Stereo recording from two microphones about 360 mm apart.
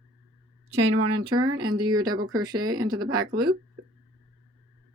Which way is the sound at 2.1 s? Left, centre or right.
Right.